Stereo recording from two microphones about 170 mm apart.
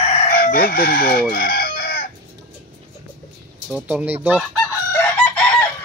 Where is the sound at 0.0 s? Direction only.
40° left (ahead or behind).